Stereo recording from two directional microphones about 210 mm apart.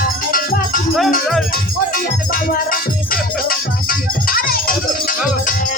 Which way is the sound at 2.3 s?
40° left (ahead or behind).